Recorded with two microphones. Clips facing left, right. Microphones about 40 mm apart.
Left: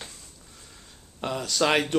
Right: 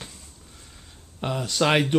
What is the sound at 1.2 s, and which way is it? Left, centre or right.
Speech, centre.